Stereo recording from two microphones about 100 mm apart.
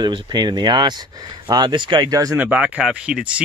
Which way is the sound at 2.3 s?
15° right (ahead or behind).